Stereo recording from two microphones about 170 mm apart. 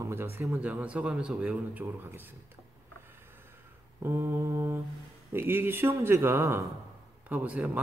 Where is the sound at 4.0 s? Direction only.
15° right (ahead or behind).